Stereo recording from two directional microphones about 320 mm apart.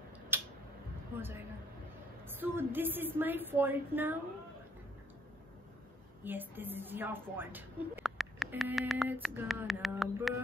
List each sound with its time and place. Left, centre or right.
0.3 s a sound: centre
2.2 s a woman's voice: centre
6.2 s a woman's voice: centre